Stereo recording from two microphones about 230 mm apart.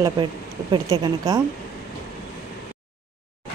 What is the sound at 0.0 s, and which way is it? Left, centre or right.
Speech, centre.